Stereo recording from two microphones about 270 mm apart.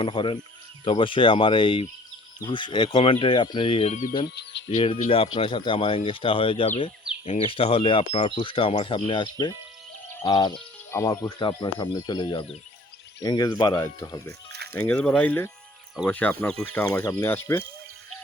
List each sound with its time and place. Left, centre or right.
0.0 s speech: centre
4.4 s cricket: left
5.0 s speech: centre